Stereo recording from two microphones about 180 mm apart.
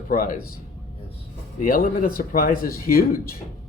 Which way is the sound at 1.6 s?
50° left (ahead or behind).